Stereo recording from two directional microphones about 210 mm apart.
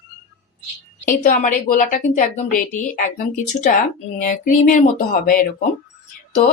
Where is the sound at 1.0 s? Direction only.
40° left (ahead or behind).